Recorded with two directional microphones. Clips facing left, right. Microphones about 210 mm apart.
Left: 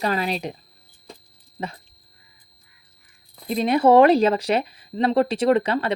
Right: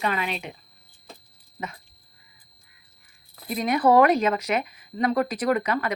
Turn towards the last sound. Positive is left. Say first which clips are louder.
# left 5 dB
turn(degrees=30)  # may be behind; listen again after turning